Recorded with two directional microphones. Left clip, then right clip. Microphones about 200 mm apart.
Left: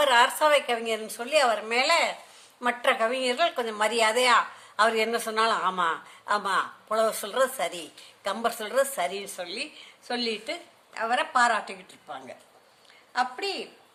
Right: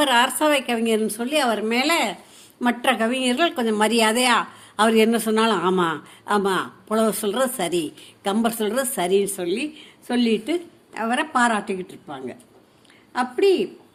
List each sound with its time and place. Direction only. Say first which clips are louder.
0.0 s a woman's voice: right 2 dB; 25° right (ahead or behind)